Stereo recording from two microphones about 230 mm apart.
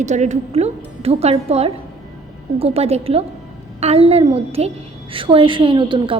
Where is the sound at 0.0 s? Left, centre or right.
Right.